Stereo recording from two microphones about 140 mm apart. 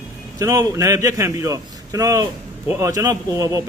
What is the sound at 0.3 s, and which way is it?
Speech, 25° right (ahead or behind).